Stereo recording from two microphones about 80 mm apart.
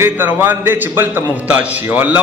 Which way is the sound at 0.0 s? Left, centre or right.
Right.